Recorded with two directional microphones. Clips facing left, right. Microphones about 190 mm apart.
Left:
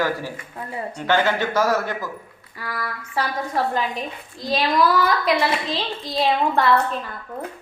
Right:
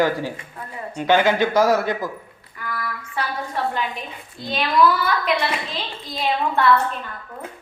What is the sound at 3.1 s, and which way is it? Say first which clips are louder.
A woman's voice: left 3 dB; 40° left (ahead or behind).